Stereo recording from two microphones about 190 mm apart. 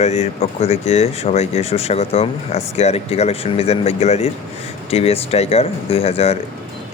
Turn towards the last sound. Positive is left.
turn(degrees=30)  # may be behind; listen again after turning